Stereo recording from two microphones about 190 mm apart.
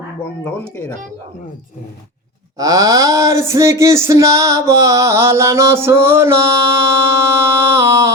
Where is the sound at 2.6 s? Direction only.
20° right (ahead or behind).